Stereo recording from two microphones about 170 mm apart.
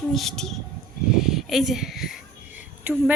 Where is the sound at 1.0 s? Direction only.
5° right (ahead or behind).